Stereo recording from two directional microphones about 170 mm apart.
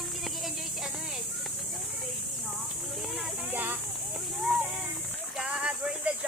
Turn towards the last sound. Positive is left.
turn(degrees=-5)  # may be behind; listen again after turning